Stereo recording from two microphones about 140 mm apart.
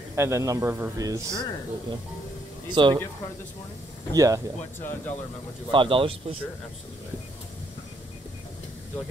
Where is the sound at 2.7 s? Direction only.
35° right (ahead or behind).